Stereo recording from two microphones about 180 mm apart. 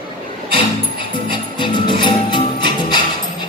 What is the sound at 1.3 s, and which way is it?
Music, 25° left (ahead or behind).